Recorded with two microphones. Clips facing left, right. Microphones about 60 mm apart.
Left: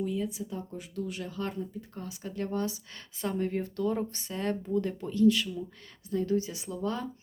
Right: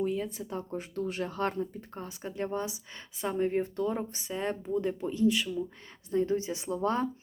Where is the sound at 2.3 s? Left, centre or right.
Right.